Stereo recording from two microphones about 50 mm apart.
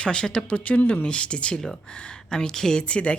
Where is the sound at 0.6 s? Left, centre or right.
Left; by 2.8 s centre.